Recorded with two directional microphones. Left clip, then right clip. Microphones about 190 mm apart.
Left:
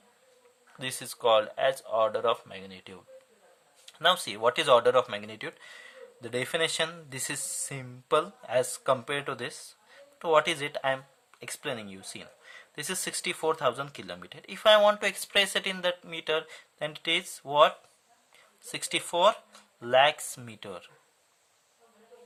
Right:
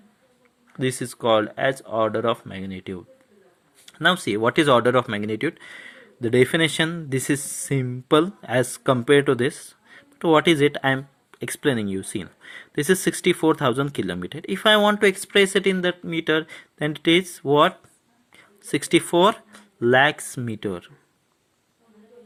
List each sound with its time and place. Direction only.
0.8 s speech: 15° right (ahead or behind)
3.8 s a sound: 20° right (ahead or behind)
4.3 s speech: 20° right (ahead or behind)